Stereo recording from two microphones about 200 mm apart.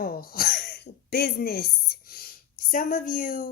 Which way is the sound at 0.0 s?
50° left (ahead or behind).